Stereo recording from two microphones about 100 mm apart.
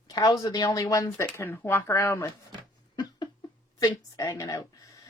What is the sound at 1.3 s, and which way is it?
Speech, 20° left (ahead or behind).